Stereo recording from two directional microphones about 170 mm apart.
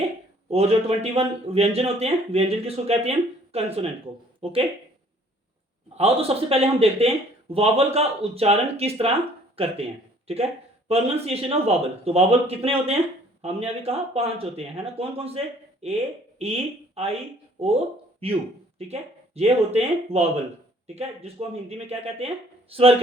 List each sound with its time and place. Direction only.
0.5 s speech: 35° right (ahead or behind)
6.0 s speech: 35° right (ahead or behind)